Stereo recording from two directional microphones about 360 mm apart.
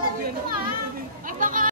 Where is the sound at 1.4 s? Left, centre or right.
Right.